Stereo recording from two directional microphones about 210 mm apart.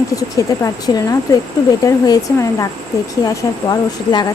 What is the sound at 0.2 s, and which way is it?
A woman's voice, 15° left (ahead or behind).